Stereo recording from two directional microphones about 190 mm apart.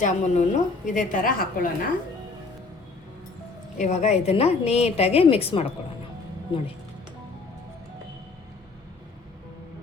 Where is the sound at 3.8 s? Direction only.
35° left (ahead or behind).